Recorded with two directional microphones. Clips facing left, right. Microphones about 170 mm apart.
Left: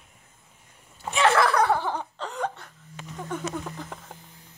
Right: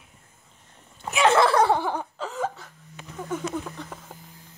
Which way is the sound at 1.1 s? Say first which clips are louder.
Right 2 dB; 20° right (ahead or behind).